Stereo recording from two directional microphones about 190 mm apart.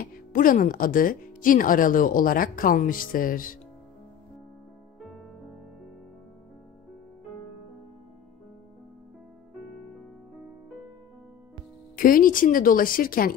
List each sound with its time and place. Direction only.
0.0 s speech: 45° left (ahead or behind)
12.0 s speech: 45° left (ahead or behind)